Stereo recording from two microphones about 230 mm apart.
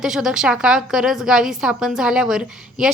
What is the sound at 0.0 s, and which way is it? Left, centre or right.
A woman's voice, centre.